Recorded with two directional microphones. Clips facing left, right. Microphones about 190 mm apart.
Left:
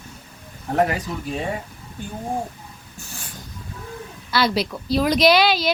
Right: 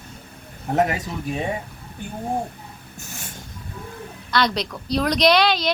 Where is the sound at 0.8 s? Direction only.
20° right (ahead or behind).